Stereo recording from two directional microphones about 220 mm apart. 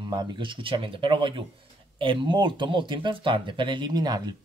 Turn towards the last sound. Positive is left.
turn(degrees=-20)  # may be behind; listen again after turning